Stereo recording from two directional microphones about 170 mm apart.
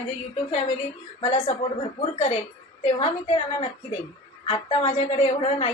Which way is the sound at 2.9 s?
40° left (ahead or behind).